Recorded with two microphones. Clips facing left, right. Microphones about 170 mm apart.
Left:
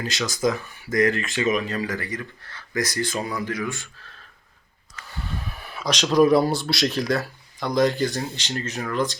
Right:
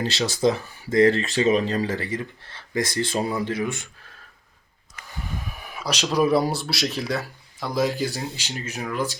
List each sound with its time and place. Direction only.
0.0 s speech: 35° right (ahead or behind)
2.0 s speech: 20° right (ahead or behind)
5.5 s speech: 10° right (ahead or behind)